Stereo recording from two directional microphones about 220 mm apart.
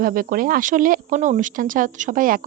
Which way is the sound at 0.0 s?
40° right (ahead or behind).